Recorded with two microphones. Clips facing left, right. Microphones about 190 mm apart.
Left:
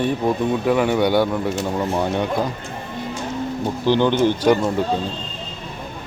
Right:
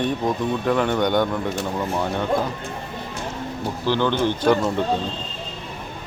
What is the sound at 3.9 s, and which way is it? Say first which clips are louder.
Speech: left 4 dB; 15° left (ahead or behind).